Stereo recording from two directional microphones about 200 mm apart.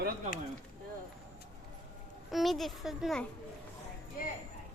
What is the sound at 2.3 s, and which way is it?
Speech, centre (ahead or behind).